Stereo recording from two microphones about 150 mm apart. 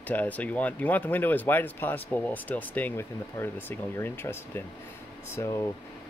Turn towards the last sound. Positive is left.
turn(degrees=20)  # may be behind; listen again after turning